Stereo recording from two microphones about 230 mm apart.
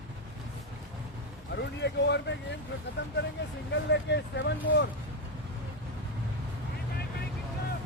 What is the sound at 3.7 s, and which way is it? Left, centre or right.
Speech, left.